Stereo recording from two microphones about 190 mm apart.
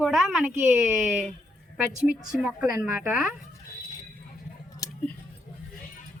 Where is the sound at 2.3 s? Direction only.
5° right (ahead or behind).